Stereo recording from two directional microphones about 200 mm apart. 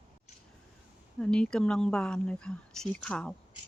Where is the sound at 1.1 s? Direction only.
5° left (ahead or behind).